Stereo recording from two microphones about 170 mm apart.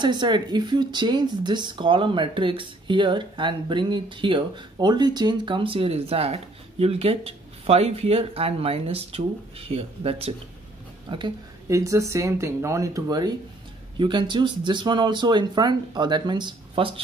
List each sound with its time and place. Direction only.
0.0 s speech: 25° right (ahead or behind)